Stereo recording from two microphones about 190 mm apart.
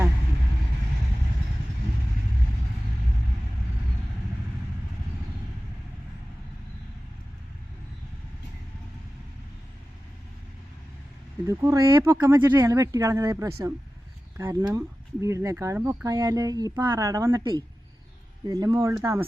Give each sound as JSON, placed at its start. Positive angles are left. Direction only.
{"t": 11.4, "sound": "speech", "side_deg": -15}